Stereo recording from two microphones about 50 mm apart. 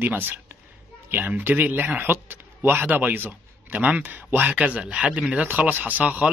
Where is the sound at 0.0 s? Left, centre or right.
Right.